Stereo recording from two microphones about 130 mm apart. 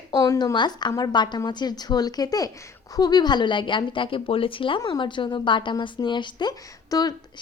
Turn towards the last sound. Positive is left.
turn(degrees=30)  # may be behind; listen again after turning